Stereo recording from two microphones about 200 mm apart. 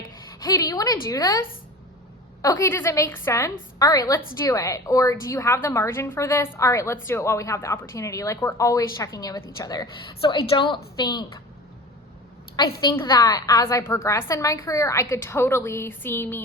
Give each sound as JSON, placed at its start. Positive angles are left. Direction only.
{"t": 0.4, "sound": "a woman's voice", "side_deg": 20}
{"t": 2.4, "sound": "a woman's voice", "side_deg": 15}
{"t": 12.6, "sound": "a woman's voice", "side_deg": 20}